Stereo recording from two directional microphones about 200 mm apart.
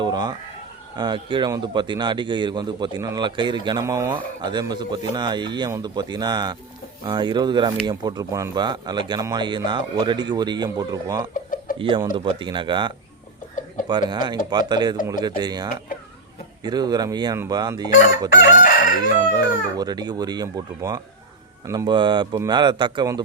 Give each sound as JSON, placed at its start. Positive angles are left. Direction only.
{"t": 0.0, "sound": "a sound", "side_deg": -20}
{"t": 0.9, "sound": "speech", "side_deg": -25}
{"t": 18.6, "sound": "crowing", "side_deg": 40}
{"t": 19.2, "sound": "speech", "side_deg": -20}